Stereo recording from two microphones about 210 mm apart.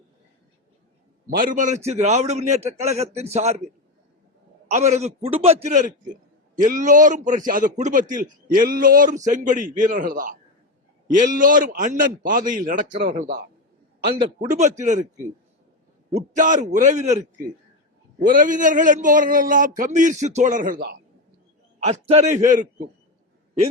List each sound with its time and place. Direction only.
1.3 s a man's voice: 45° right (ahead or behind)
4.7 s a man's voice: 35° right (ahead or behind)
14.5 s a man's voice: 35° right (ahead or behind)
16.3 s a man's voice: 35° right (ahead or behind)
21.8 s a man's voice: 30° right (ahead or behind)